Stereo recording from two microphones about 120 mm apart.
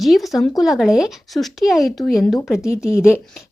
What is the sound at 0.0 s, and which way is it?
Speech, centre (ahead or behind).